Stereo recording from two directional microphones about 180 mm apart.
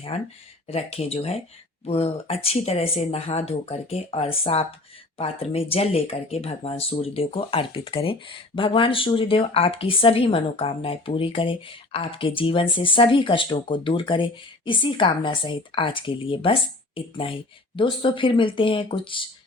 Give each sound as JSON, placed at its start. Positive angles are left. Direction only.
{"t": 0.1, "sound": "speech", "side_deg": 35}